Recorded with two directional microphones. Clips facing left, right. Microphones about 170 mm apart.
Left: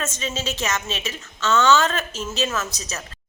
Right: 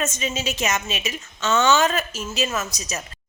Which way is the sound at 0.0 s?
15° right (ahead or behind).